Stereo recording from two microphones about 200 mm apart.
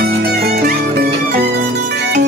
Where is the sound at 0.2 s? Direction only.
55° right (ahead or behind).